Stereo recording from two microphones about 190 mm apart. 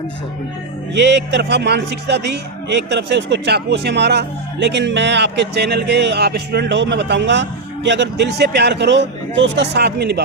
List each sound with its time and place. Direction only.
0.9 s a man's voice: 65° right (ahead or behind)